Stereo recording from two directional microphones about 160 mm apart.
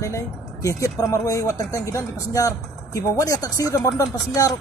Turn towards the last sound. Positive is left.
turn(degrees=20)  # may be behind; listen again after turning